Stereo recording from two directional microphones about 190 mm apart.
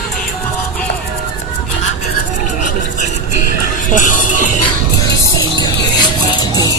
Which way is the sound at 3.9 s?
45° left (ahead or behind).